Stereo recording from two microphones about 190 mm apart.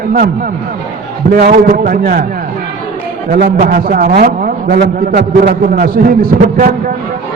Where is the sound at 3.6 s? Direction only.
50° right (ahead or behind).